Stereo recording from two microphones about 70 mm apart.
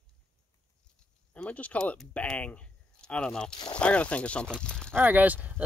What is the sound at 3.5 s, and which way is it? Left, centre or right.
Speech, left.